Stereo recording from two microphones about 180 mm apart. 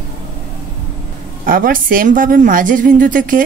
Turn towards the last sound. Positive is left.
turn(degrees=-50)  # may be behind; listen again after turning